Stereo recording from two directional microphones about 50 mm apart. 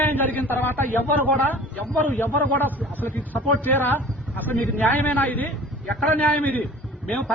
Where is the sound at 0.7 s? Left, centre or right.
Left.